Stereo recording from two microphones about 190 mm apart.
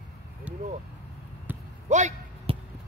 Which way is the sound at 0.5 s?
5° right (ahead or behind).